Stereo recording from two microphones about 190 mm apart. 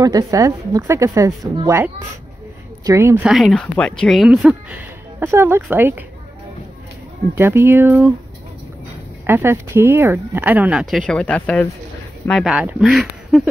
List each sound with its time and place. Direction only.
0.0 s speech: 20° right (ahead or behind)
2.8 s speech: 15° right (ahead or behind)
3.3 s speech: centre (ahead or behind)
7.3 s speech: 10° right (ahead or behind)
9.2 s speech: 10° right (ahead or behind)